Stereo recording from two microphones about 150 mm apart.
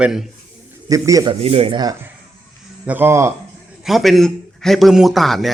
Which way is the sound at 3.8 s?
Centre (ahead or behind).